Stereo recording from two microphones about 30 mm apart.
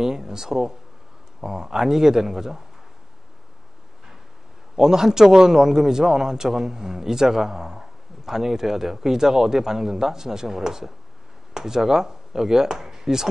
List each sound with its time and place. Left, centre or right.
0.0 s a man's voice: centre
4.7 s a man's voice: centre